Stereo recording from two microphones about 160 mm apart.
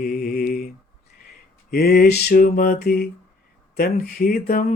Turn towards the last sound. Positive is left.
turn(degrees=55)  # may be behind; listen again after turning